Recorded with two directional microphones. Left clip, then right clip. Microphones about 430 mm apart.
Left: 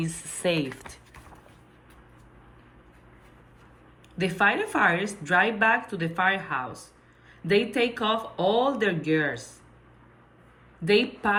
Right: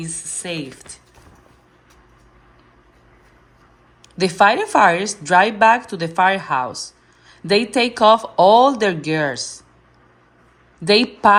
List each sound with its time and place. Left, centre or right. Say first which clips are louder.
0.0 s speech: left 1 dB; centre
4.2 s a woman's voice: right 9 dB; centre
10.8 s a woman's voice: right 10 dB; centre